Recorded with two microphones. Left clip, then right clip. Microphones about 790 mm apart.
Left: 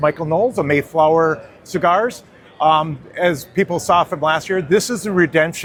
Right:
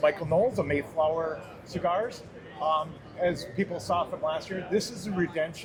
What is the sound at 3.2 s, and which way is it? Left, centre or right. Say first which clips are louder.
Speech: left 11 dB; left.